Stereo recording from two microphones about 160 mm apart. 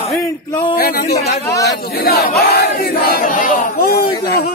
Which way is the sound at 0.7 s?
65° left (ahead or behind).